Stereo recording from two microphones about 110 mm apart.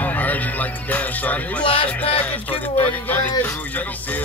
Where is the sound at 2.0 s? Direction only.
60° left (ahead or behind).